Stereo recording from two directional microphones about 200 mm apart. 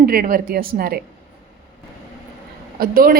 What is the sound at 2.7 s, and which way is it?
Speech, 45° right (ahead or behind).